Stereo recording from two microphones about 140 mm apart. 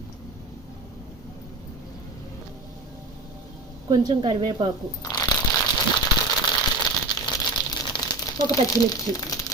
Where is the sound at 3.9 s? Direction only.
30° right (ahead or behind).